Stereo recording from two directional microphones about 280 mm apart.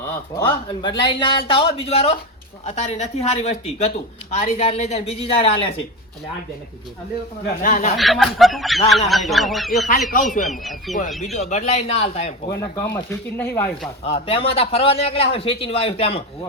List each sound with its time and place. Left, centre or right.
0.3 s speech: centre
7.4 s speech: left
7.9 s a man's voice: centre
11.3 s speech: left
12.5 s speech: centre
14.0 s speech: centre